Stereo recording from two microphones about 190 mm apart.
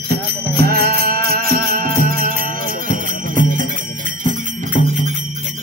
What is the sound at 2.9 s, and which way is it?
Jingle bell, 45° right (ahead or behind).